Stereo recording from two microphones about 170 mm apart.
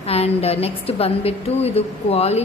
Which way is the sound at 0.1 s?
35° left (ahead or behind).